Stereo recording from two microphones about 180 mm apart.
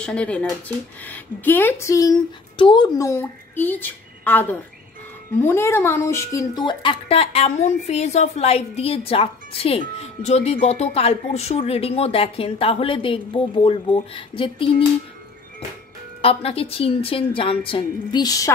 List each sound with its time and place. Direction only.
0.0 s a woman's voice: 5° left (ahead or behind); by 14.7 s 30° left (ahead or behind)
16.2 s a woman's voice: 30° left (ahead or behind)